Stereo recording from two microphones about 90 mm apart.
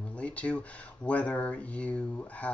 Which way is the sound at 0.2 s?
15° left (ahead or behind).